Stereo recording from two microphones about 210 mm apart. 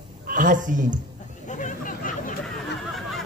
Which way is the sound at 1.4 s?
35° left (ahead or behind).